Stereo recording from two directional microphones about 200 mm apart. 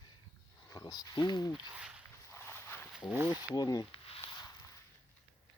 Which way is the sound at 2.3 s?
10° left (ahead or behind).